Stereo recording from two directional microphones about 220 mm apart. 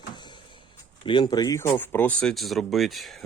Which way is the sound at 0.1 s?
20° left (ahead or behind).